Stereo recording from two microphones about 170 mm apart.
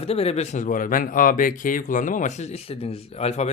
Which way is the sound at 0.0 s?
35° left (ahead or behind).